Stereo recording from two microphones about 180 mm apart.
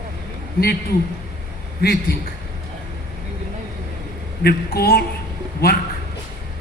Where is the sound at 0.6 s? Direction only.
60° left (ahead or behind).